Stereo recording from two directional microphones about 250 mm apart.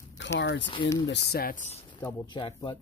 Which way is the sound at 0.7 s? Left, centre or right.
Centre.